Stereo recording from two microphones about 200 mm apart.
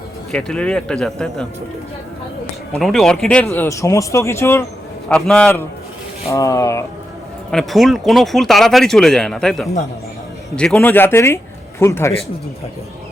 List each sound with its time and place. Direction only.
0.3 s speech: 5° left (ahead or behind)
2.7 s speech: centre (ahead or behind)
7.5 s speech: centre (ahead or behind)